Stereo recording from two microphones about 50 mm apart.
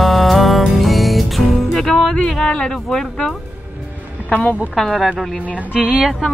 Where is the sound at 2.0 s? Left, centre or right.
Left.